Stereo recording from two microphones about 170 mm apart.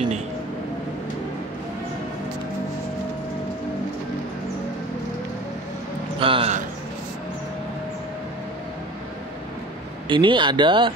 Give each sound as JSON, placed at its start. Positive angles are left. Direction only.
{"t": 6.1, "sound": "speech", "side_deg": -30}
{"t": 10.0, "sound": "speech", "side_deg": -30}